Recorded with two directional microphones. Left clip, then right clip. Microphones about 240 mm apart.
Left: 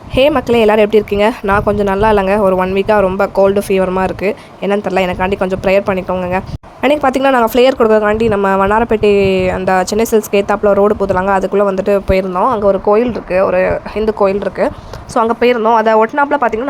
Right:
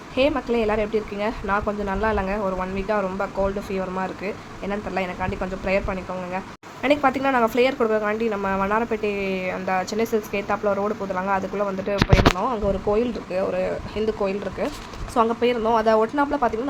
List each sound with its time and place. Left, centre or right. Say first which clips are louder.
0.2 s a woman's voice: left 11 dB; left
12.4 s speech: left 12 dB; left